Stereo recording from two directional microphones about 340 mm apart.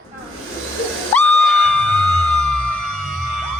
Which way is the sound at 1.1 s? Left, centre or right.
Centre.